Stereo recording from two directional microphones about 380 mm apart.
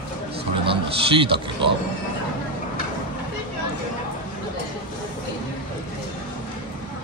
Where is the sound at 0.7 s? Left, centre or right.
Centre.